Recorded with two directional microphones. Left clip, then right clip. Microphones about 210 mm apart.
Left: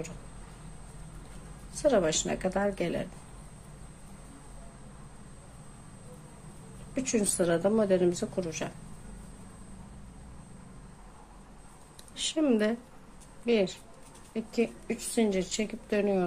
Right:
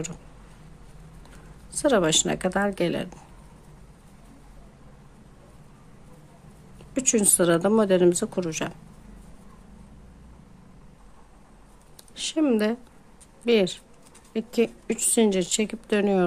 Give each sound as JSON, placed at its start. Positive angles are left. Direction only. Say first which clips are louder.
{"t": 1.7, "sound": "a woman's voice", "louder": "right 4 dB", "side_deg": -35}
{"t": 6.9, "sound": "a woman's voice", "louder": "right 7 dB", "side_deg": -40}
{"t": 12.2, "sound": "speech", "louder": "right 4 dB", "side_deg": -20}
{"t": 13.5, "sound": "a woman's voice", "louder": "right 6 dB", "side_deg": -40}